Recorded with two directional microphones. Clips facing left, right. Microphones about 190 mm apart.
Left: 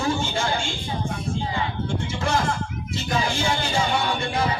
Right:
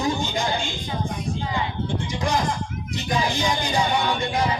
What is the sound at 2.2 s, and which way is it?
Speech, 15° right (ahead or behind).